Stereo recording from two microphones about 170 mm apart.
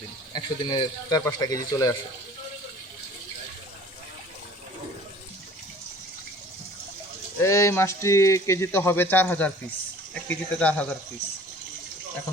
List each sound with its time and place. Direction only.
0.3 s speech: 25° left (ahead or behind)
7.4 s speech: 15° left (ahead or behind)